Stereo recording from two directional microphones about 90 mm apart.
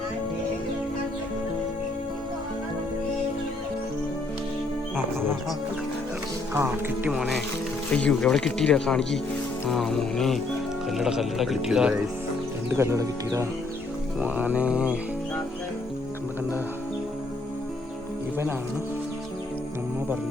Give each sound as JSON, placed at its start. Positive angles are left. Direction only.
{"t": 6.5, "sound": "speech", "side_deg": -25}
{"t": 7.1, "sound": "speech", "side_deg": 0}
{"t": 7.9, "sound": "speech", "side_deg": 15}
{"t": 12.7, "sound": "speech", "side_deg": -35}
{"t": 14.2, "sound": "a sound", "side_deg": -20}